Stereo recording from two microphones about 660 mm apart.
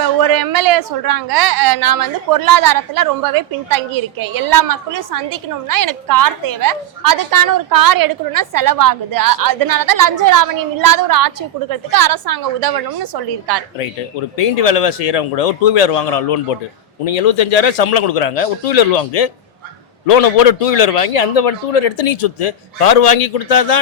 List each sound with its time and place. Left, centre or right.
0.2 s a woman's voice: right
14.3 s a man's voice: left